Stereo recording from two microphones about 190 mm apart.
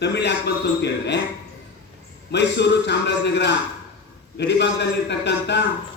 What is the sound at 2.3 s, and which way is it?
A man's voice, 65° left (ahead or behind).